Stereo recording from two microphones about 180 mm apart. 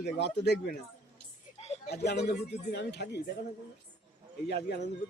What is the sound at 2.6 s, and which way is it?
Speech, 70° left (ahead or behind).